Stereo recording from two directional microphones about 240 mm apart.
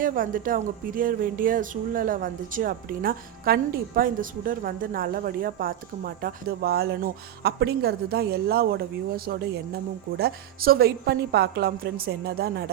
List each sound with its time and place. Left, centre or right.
0.0 s speech: right